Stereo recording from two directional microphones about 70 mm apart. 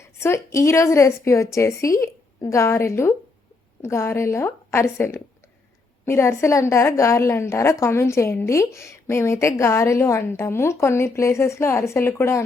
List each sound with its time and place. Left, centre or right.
0.2 s a woman's voice: left